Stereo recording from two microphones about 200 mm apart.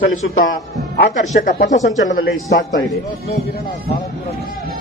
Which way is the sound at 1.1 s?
40° left (ahead or behind).